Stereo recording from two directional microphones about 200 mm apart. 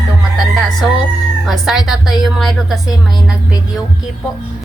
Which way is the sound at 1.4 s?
Centre (ahead or behind).